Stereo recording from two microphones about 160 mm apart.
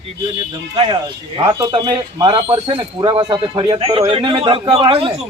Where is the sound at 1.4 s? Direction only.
30° right (ahead or behind).